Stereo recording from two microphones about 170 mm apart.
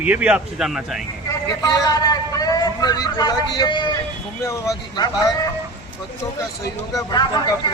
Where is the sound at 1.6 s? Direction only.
20° left (ahead or behind).